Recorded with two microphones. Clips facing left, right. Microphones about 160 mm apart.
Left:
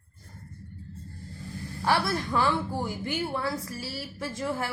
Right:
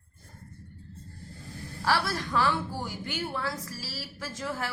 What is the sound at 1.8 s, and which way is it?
A woman's voice, 15° left (ahead or behind).